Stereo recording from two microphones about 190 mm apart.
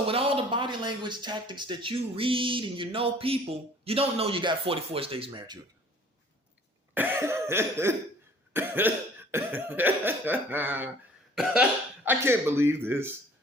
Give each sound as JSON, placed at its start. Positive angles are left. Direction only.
{"t": 0.1, "sound": "speech", "side_deg": -30}
{"t": 6.9, "sound": "cough", "side_deg": -10}
{"t": 8.5, "sound": "speech", "side_deg": -10}
{"t": 12.0, "sound": "speech", "side_deg": -15}